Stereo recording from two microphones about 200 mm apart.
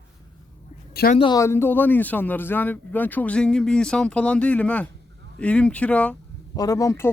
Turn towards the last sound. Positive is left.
turn(degrees=15)  # may be behind; listen again after turning